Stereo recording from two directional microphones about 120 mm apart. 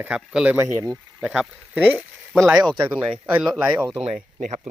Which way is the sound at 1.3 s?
5° right (ahead or behind).